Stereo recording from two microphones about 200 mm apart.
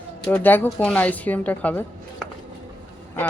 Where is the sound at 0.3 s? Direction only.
10° left (ahead or behind).